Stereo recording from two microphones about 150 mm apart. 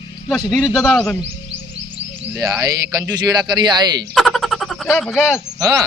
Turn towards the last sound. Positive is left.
turn(degrees=-25)  # may be behind; listen again after turning